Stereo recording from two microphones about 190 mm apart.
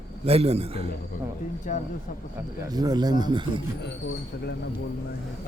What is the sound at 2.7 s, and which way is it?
Speech, 20° right (ahead or behind).